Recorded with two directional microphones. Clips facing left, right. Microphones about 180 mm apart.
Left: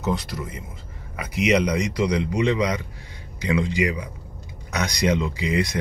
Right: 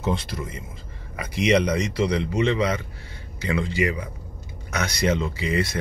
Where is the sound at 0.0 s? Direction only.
25° right (ahead or behind).